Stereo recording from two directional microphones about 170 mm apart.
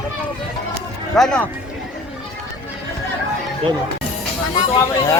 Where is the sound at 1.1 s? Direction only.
Centre (ahead or behind).